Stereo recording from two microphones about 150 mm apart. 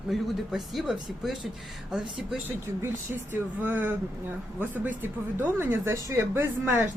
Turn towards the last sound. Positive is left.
turn(degrees=-15)  # may be behind; listen again after turning